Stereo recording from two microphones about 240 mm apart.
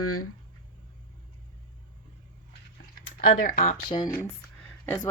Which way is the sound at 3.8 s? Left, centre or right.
Centre.